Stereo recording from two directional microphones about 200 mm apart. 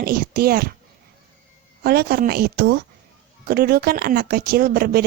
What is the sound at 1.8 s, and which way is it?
A woman's voice, 50° right (ahead or behind).